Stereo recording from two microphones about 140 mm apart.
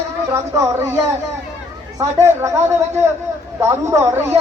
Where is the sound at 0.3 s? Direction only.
20° right (ahead or behind).